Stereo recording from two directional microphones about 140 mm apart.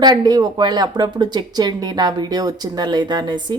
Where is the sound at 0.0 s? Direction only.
30° right (ahead or behind).